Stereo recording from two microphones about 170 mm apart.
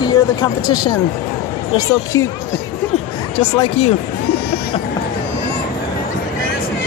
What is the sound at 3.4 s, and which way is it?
Speech, 35° left (ahead or behind).